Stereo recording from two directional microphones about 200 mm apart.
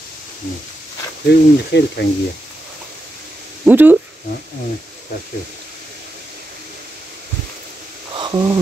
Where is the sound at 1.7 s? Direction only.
60° left (ahead or behind).